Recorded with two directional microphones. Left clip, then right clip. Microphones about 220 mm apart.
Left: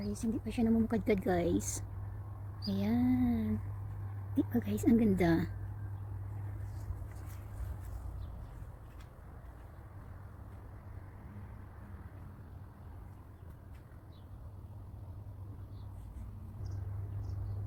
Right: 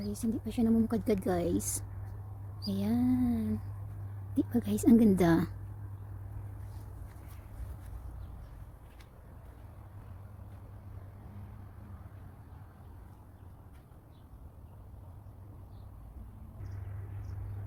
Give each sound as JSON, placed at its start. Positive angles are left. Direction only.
{"t": 0.0, "sound": "a woman's voice", "side_deg": -15}
{"t": 2.6, "sound": "a woman's voice", "side_deg": -10}